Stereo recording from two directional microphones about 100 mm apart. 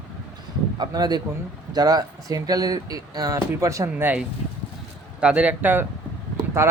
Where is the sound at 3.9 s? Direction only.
15° right (ahead or behind).